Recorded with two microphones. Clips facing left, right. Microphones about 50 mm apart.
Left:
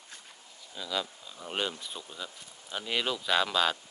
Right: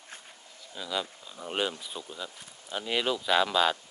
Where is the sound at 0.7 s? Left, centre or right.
Centre.